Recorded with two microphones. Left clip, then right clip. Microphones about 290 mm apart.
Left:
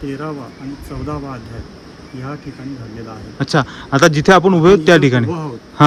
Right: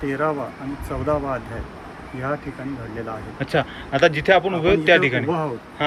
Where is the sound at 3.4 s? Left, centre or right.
Centre.